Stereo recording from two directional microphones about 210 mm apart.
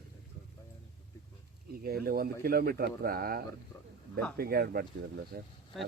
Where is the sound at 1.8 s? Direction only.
45° right (ahead or behind).